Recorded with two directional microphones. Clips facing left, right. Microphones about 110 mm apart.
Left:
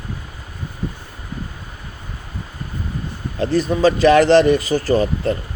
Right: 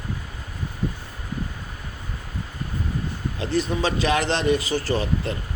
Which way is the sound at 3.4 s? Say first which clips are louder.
Left 8 dB; 45° left (ahead or behind).